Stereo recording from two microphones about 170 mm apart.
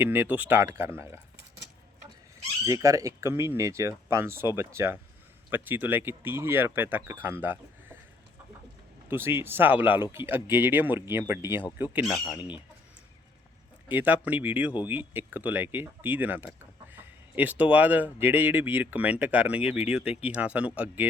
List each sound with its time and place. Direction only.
0.0 s speech: 15° right (ahead or behind)
2.6 s speech: 20° right (ahead or behind)
9.0 s speech: 15° right (ahead or behind)
13.8 s speech: 10° right (ahead or behind)